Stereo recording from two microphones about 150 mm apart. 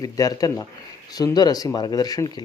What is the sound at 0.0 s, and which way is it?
Speech, 25° left (ahead or behind).